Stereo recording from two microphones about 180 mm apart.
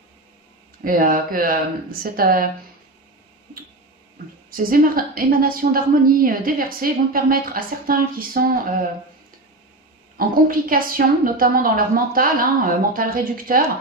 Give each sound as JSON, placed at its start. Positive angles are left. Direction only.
{"t": 0.8, "sound": "a woman's voice", "side_deg": -50}
{"t": 4.5, "sound": "a woman's voice", "side_deg": -50}
{"t": 10.1, "sound": "a woman's voice", "side_deg": -50}